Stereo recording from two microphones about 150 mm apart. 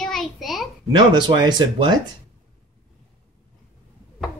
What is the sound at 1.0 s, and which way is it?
Speech, 30° right (ahead or behind).